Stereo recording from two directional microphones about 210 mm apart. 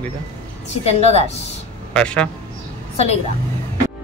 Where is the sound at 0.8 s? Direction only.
30° left (ahead or behind).